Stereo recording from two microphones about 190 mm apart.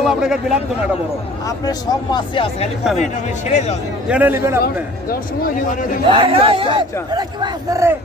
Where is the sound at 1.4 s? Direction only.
20° left (ahead or behind).